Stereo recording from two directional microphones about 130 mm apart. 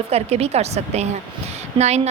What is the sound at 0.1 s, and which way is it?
A woman's voice, 55° right (ahead or behind).